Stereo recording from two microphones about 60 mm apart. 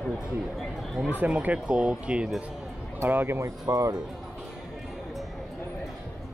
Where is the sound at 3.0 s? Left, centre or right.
Right.